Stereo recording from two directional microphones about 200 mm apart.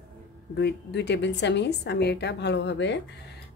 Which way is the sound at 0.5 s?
60° left (ahead or behind).